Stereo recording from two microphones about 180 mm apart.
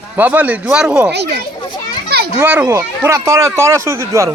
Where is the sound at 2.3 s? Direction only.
10° right (ahead or behind).